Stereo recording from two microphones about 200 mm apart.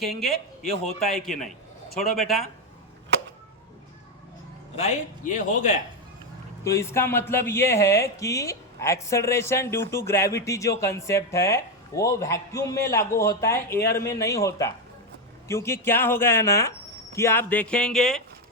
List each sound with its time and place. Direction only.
0.0 s speech: centre (ahead or behind)
4.8 s a man's voice: 35° left (ahead or behind)
6.7 s speech: 15° left (ahead or behind)